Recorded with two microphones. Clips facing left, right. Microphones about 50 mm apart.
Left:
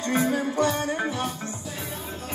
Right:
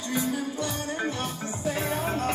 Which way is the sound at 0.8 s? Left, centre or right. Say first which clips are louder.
Left 3 dB; left.